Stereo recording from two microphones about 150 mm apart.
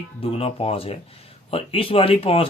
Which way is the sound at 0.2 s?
40° left (ahead or behind).